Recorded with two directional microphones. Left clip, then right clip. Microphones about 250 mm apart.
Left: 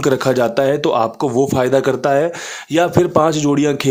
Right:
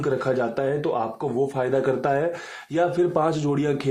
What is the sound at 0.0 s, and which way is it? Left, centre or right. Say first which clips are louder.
A man's voice: left 9 dB; left.